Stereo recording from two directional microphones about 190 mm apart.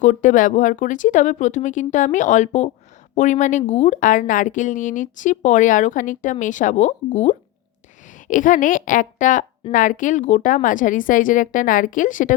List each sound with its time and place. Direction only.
0.0 s a woman's voice: 40° left (ahead or behind)